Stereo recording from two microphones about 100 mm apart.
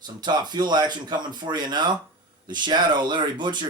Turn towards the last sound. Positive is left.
turn(degrees=-50)  # may be behind; listen again after turning